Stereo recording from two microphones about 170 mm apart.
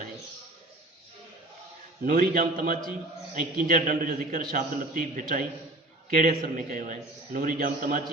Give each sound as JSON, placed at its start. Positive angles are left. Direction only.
{"t": 2.0, "sound": "a man's voice", "side_deg": -55}